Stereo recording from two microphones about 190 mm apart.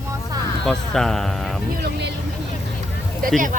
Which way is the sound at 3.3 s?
45° right (ahead or behind).